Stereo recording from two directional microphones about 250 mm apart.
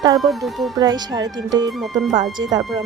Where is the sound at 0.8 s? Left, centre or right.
Centre.